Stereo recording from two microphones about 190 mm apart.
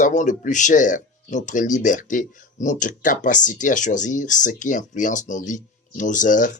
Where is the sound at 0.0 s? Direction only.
40° left (ahead or behind).